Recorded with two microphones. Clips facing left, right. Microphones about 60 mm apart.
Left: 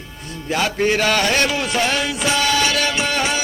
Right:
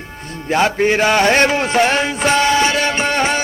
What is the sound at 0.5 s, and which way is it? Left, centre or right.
Music, right.